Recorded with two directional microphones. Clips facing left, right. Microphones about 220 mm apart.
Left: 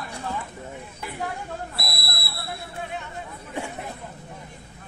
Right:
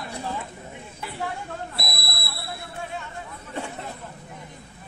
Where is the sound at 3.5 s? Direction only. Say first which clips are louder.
Left 1 dB; 15° left (ahead or behind).